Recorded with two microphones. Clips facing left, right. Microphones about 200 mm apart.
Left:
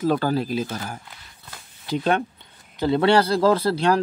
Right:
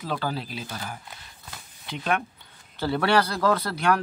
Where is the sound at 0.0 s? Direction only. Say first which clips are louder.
Left 9 dB; 45° left (ahead or behind).